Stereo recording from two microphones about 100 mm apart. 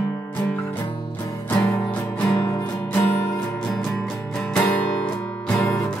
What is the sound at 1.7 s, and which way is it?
Music, 15° left (ahead or behind).